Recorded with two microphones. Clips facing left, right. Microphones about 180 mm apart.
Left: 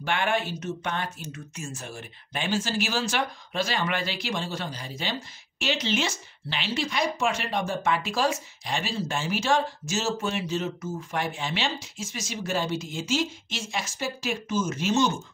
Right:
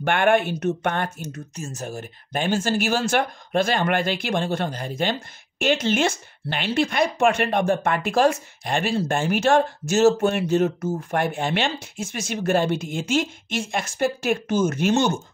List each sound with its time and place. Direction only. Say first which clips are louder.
0.0 s speech: right 8 dB; 55° right (ahead or behind)